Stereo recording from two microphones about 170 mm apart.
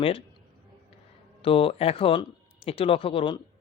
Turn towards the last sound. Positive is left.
turn(degrees=30)  # may be behind; listen again after turning